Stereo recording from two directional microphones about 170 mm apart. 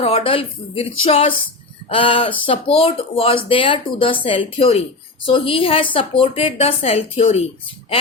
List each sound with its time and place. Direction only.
0.0 s a woman's voice: 35° left (ahead or behind)